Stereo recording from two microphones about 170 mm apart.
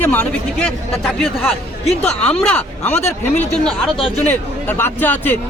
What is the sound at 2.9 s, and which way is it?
Speech, 40° left (ahead or behind).